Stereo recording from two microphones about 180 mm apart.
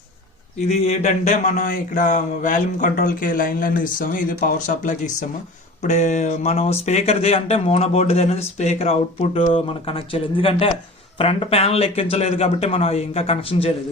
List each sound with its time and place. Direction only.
0.7 s speech: 40° left (ahead or behind)